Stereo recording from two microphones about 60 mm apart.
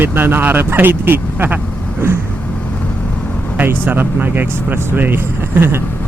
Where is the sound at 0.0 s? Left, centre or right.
Right.